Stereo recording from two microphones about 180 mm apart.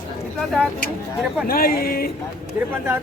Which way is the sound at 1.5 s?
55° left (ahead or behind).